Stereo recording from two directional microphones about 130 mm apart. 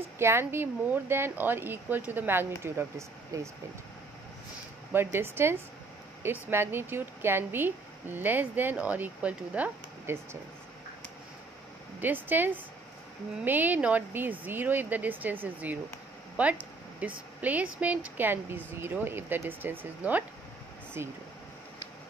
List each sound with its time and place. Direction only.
0.2 s a woman's voice: 20° right (ahead or behind)
4.9 s a woman's voice: 15° right (ahead or behind)
12.0 s a woman's voice: 15° right (ahead or behind)
16.3 s a sound: 10° right (ahead or behind)
17.4 s a woman's voice: 10° right (ahead or behind)